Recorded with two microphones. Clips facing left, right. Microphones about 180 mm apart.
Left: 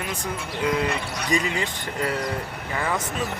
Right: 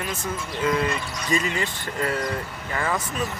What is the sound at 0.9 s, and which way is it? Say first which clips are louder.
Speech: left 1 dB; 65° left (ahead or behind).